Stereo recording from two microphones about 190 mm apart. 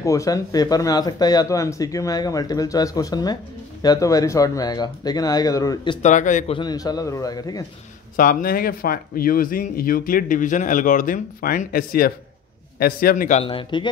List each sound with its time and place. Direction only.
0.0 s speech: 15° left (ahead or behind)
6.0 s speech: 40° left (ahead or behind)
6.5 s speech: 20° left (ahead or behind)
8.2 s speech: 50° left (ahead or behind)
13.4 s speech: 25° left (ahead or behind)